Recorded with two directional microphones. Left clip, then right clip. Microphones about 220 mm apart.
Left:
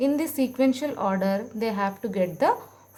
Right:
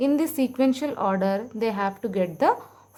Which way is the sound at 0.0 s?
25° right (ahead or behind).